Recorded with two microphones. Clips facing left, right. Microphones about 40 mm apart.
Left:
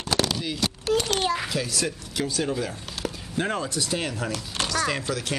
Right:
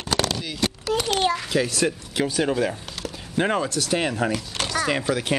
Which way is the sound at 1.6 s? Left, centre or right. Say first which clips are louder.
Right 5 dB; right.